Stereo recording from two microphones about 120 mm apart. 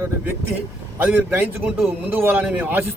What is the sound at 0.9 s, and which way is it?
A man's voice, 15° right (ahead or behind).